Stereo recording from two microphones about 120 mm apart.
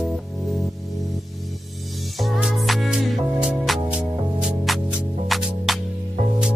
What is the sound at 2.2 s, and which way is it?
Music, centre (ahead or behind).